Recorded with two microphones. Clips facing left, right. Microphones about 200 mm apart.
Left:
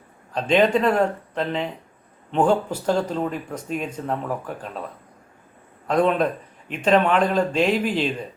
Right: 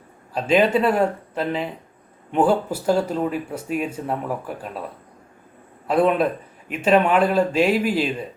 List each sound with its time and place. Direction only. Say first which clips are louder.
0.3 s speech: right 1 dB; 5° right (ahead or behind)
5.9 s speech: right 1 dB; 5° right (ahead or behind)